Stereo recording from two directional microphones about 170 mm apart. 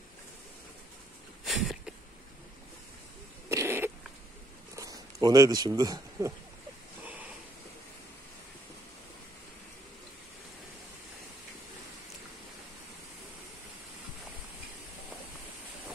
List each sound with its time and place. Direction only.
1.4 s a sound: centre (ahead or behind)
3.4 s cat: 15° right (ahead or behind)
4.7 s speech: 20° right (ahead or behind)